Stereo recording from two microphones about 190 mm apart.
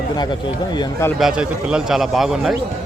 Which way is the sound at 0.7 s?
20° left (ahead or behind).